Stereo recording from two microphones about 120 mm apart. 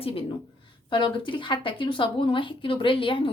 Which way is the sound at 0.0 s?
50° left (ahead or behind).